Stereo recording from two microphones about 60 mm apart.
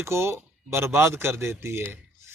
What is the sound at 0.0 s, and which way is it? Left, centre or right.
Speech, right.